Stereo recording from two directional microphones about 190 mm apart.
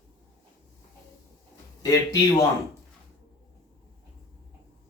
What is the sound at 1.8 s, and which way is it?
Speech, 20° left (ahead or behind).